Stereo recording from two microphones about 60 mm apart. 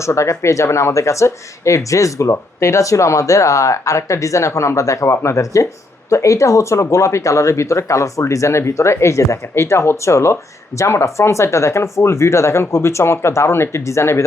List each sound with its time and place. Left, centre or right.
0.0 s speech: left